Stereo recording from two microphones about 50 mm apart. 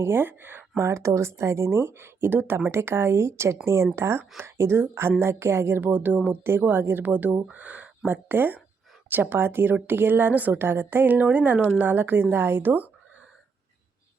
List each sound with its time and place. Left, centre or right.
0.0 s speech: right
0.8 s speech: right
2.7 s speech: right
5.8 s a woman's voice: right
6.4 s a woman's voice: right
8.0 s a woman's voice: right
10.6 s a woman's voice: right
11.8 s speech: right